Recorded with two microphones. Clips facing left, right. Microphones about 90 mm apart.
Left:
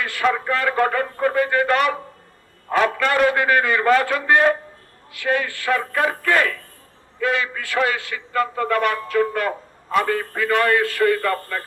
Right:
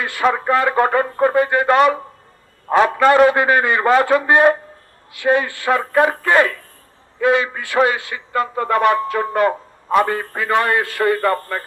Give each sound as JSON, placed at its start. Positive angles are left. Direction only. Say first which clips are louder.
{"t": 0.0, "sound": "a man's voice", "louder": "right 3 dB", "side_deg": -25}